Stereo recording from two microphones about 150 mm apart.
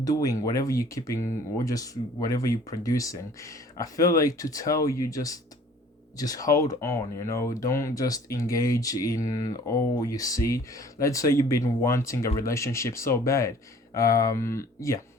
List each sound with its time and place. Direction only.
0.0 s speech: 25° left (ahead or behind)